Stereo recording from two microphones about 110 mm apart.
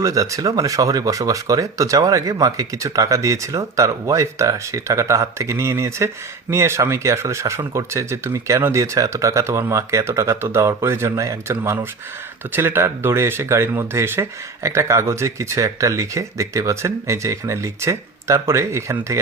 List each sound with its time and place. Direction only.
0.0 s speech: 30° right (ahead or behind)